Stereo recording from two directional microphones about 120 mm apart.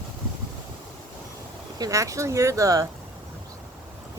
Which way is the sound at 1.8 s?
25° right (ahead or behind).